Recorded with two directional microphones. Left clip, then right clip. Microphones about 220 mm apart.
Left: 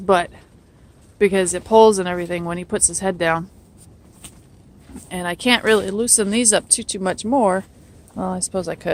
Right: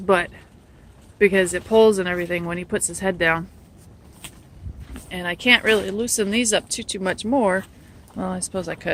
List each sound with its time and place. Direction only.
0.0 s speech: 15° left (ahead or behind)
5.0 s speech: 25° left (ahead or behind)